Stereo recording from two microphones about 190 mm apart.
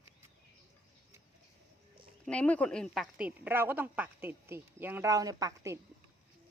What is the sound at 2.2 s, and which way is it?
A woman's voice, 5° left (ahead or behind).